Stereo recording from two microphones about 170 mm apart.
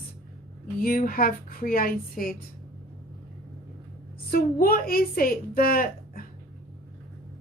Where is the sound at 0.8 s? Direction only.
60° left (ahead or behind).